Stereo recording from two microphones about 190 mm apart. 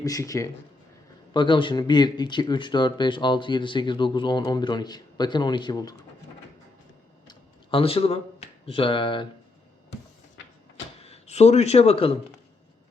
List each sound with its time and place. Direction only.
0.0 s speech: 15° left (ahead or behind)
7.3 s speech: 30° left (ahead or behind)
11.0 s speech: 35° left (ahead or behind)